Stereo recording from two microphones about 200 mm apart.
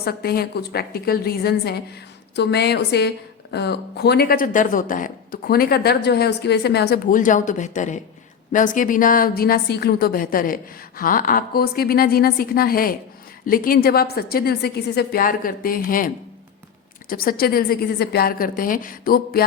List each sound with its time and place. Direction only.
0.0 s a woman's voice: 50° left (ahead or behind)